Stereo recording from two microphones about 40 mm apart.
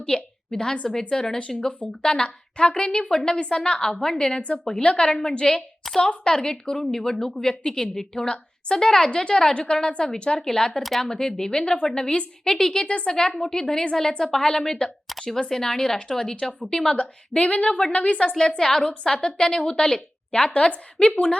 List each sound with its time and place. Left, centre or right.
0.1 s a woman's voice: left
1.4 s a woman's voice: left
4.4 s a woman's voice: left
4.6 s a woman's voice: left
5.8 s a sound: centre
6.2 s a woman's voice: centre
17.0 s a woman's voice: left
18.2 s a woman's voice: centre